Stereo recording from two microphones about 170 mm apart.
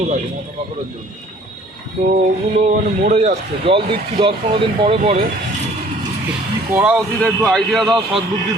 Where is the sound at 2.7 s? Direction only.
40° right (ahead or behind).